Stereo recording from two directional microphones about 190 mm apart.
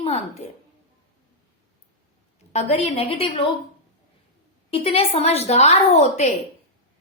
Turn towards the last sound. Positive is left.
turn(degrees=35)  # may be behind; listen again after turning